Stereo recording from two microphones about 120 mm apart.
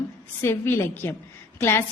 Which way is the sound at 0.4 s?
20° left (ahead or behind).